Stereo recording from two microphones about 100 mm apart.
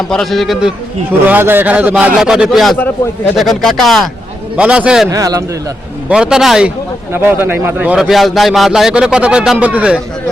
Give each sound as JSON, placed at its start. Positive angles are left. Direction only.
{"t": 0.1, "sound": "speech", "side_deg": 0}
{"t": 1.3, "sound": "speech", "side_deg": -20}
{"t": 4.5, "sound": "speech", "side_deg": -10}
{"t": 5.1, "sound": "a man's voice", "side_deg": -35}
{"t": 6.1, "sound": "speech", "side_deg": -5}
{"t": 7.1, "sound": "speech", "side_deg": -20}
{"t": 7.9, "sound": "speech", "side_deg": 0}